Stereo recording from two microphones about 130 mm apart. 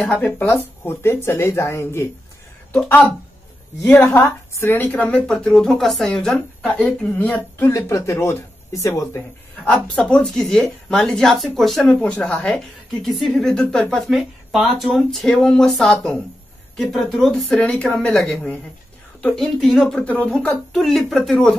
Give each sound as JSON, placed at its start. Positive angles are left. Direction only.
{"t": 0.2, "sound": "speech", "side_deg": 15}
{"t": 4.1, "sound": "speech", "side_deg": 20}
{"t": 9.7, "sound": "speech", "side_deg": 10}